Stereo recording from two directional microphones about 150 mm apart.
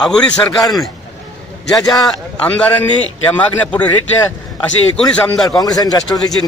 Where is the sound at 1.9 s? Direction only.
5° left (ahead or behind).